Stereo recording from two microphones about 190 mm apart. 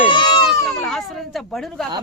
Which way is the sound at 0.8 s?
Centre (ahead or behind).